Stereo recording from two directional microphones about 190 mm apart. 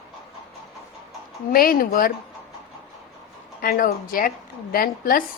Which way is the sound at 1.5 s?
50° left (ahead or behind).